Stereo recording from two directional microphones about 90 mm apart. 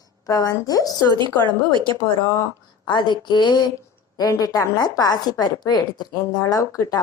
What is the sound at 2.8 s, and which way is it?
Speech, 55° left (ahead or behind).